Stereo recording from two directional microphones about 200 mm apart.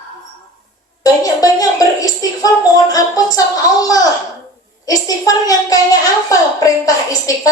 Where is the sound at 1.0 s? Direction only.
15° left (ahead or behind).